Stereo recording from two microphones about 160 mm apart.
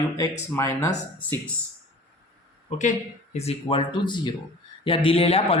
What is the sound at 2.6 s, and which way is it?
Speech, 50° left (ahead or behind).